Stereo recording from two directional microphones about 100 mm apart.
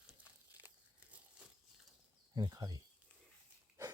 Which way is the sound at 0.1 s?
15° right (ahead or behind).